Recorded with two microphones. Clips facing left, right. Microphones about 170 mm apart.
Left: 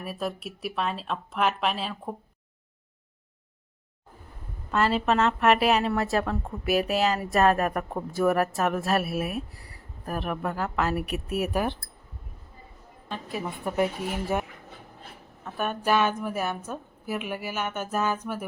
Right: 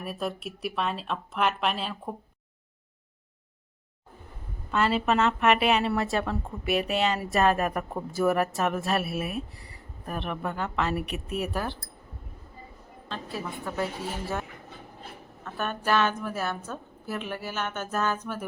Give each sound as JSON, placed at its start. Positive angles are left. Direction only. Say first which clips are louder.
{"t": 0.0, "sound": "speech", "louder": "even", "side_deg": 0}
{"t": 4.7, "sound": "speech", "louder": "left 1 dB", "side_deg": 0}
{"t": 13.1, "sound": "a woman's voice", "louder": "left 2 dB", "side_deg": 15}
{"t": 15.4, "sound": "a woman's voice", "louder": "left 2 dB", "side_deg": 10}